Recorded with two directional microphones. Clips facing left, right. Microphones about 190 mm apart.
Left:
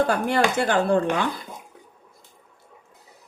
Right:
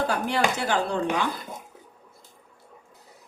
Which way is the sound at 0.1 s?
55° left (ahead or behind).